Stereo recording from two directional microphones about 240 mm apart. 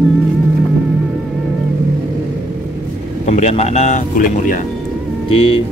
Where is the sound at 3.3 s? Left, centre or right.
Left.